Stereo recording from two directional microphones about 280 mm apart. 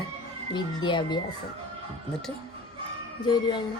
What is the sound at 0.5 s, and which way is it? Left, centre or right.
Speech, centre.